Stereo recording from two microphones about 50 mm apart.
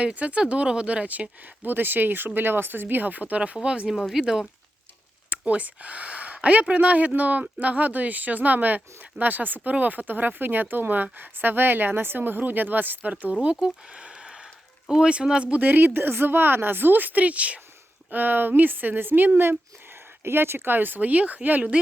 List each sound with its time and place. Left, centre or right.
0.0 s speech: right; by 4.4 s centre
5.3 s speech: right
13.4 s a sound: right
15.1 s speech: centre
15.6 s speech: right
18.1 s speech: right
20.7 s speech: right